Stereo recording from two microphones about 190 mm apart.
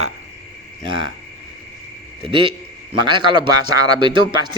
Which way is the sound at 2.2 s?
25° right (ahead or behind).